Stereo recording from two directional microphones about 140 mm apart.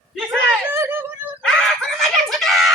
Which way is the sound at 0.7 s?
15° right (ahead or behind).